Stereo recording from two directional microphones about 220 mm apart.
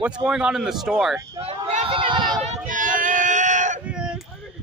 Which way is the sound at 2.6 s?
35° right (ahead or behind).